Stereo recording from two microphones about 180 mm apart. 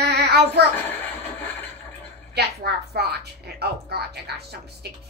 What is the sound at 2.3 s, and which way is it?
Speech, 65° right (ahead or behind).